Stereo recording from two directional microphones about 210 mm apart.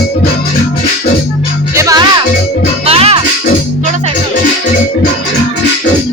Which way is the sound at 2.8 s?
30° right (ahead or behind).